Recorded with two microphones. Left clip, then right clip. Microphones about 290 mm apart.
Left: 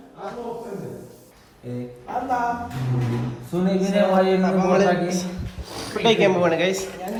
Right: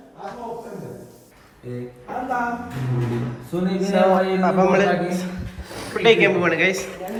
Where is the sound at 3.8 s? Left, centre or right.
Centre.